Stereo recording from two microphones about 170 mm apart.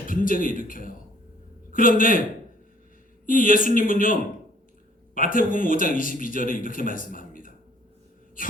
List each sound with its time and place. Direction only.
0.0 s speech: 55° left (ahead or behind)
3.2 s speech: 55° left (ahead or behind)
8.4 s a sound: 55° left (ahead or behind)